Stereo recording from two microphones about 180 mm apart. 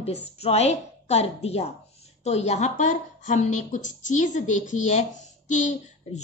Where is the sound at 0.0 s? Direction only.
35° left (ahead or behind).